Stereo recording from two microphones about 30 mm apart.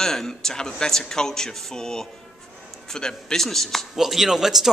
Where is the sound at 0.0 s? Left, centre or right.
Centre.